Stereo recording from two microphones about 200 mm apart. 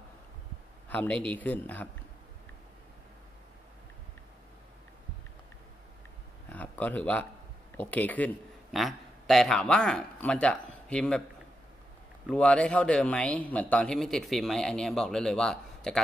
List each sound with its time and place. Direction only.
0.8 s speech: 10° left (ahead or behind)
6.5 s a sound: 10° left (ahead or behind)
7.7 s a man's voice: 10° left (ahead or behind)
12.3 s speech: 5° left (ahead or behind)